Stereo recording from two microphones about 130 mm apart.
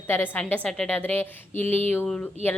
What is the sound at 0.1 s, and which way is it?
A woman's voice, 15° left (ahead or behind).